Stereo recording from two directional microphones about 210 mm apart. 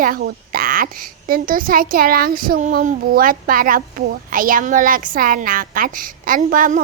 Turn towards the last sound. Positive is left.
turn(degrees=-40)  # may be behind; listen again after turning